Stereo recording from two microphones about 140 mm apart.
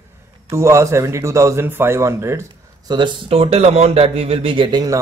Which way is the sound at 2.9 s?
35° right (ahead or behind).